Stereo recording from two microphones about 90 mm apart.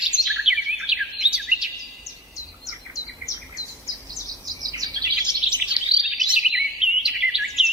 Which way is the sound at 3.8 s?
45° right (ahead or behind).